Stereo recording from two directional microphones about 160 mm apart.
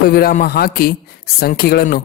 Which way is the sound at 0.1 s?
65° left (ahead or behind).